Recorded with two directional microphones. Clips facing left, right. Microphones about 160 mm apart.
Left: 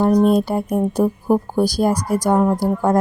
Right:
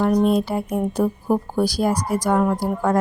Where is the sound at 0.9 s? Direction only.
35° left (ahead or behind).